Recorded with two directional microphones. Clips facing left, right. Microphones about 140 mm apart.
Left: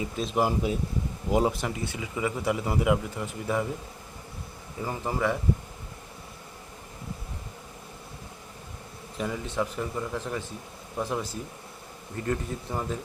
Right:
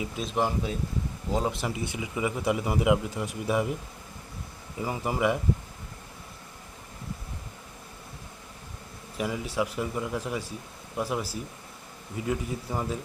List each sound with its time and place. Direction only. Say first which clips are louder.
0.0 s speech: left 2 dB; centre (ahead or behind)
1.7 s speech: right 1 dB; 20° right (ahead or behind)
4.8 s speech: right 1 dB; 10° right (ahead or behind)
9.1 s speech: right 1 dB; 10° right (ahead or behind)